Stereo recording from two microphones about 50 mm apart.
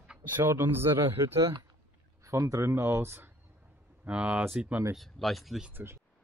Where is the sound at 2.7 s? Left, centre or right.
Right.